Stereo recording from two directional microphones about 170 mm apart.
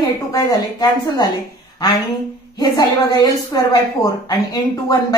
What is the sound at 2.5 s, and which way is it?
A woman's voice, 25° left (ahead or behind).